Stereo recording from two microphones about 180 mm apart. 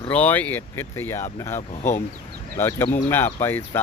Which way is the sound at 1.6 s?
40° left (ahead or behind).